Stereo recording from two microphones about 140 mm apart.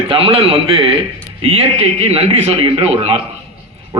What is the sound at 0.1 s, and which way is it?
A man's voice, 40° right (ahead or behind).